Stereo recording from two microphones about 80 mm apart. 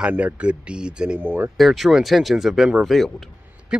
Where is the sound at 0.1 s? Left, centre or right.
Right.